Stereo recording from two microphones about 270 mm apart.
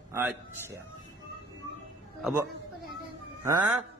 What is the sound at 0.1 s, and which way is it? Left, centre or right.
Speech, centre.